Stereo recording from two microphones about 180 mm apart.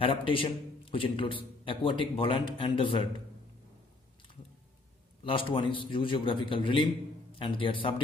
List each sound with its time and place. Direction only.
0.0 s a man's voice: 30° left (ahead or behind)
5.2 s a man's voice: 30° left (ahead or behind)